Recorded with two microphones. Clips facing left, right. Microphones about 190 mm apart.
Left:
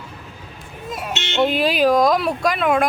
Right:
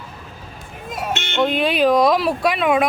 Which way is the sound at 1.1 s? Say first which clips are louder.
Right 2 dB; 50° right (ahead or behind).